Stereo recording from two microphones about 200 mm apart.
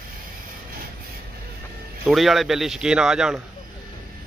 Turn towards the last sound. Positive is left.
turn(degrees=-5)  # may be behind; listen again after turning